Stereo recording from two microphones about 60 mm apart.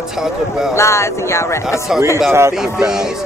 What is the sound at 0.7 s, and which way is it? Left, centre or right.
Speech, left.